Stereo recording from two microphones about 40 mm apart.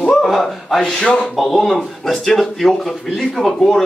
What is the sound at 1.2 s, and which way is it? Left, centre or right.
Speech, centre.